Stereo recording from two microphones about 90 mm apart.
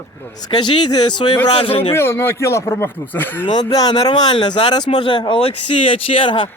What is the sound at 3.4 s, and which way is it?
Speech, 50° left (ahead or behind).